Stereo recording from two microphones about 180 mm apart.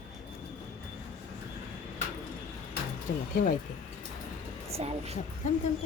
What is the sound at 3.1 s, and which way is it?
Speech, 60° left (ahead or behind).